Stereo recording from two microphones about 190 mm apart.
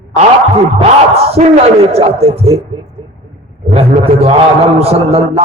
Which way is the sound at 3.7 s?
30° right (ahead or behind).